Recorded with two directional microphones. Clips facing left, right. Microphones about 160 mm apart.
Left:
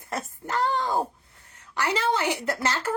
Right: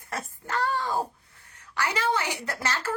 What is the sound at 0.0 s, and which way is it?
Speech, 20° left (ahead or behind).